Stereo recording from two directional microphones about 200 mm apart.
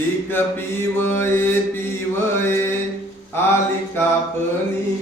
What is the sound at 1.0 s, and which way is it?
Mantra, 10° left (ahead or behind).